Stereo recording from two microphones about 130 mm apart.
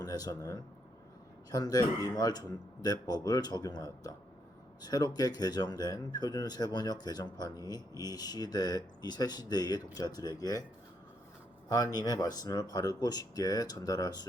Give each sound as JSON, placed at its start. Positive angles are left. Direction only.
{"t": 0.0, "sound": "a man's voice", "side_deg": 30}
{"t": 11.7, "sound": "speech", "side_deg": 30}